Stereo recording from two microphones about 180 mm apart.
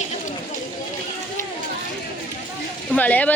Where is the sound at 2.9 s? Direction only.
10° left (ahead or behind).